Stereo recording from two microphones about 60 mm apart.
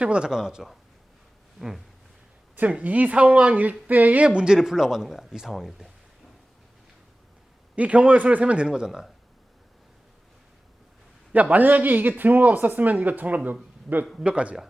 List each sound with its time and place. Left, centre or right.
0.0 s speech: centre
1.5 s a sound: centre
2.6 s a woman's voice: right; by 5.9 s centre
7.8 s a woman's voice: right
11.3 s a woman's voice: right